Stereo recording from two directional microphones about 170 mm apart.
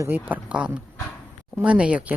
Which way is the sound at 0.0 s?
10° right (ahead or behind).